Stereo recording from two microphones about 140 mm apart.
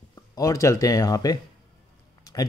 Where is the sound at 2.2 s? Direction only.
25° left (ahead or behind).